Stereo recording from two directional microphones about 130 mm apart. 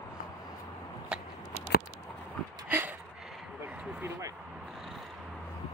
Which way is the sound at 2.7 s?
15° right (ahead or behind).